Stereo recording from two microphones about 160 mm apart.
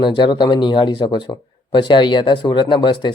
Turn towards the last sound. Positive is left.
turn(degrees=25)  # may be behind; listen again after turning